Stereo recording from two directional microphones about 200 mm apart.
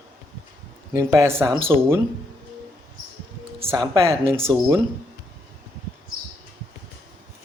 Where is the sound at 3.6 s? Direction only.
20° right (ahead or behind).